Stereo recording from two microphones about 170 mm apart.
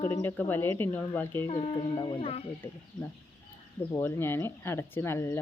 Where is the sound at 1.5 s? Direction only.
35° left (ahead or behind).